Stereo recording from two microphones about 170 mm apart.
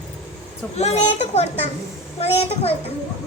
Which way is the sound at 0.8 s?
40° left (ahead or behind).